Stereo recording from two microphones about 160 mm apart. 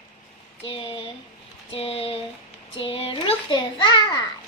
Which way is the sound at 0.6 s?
35° left (ahead or behind).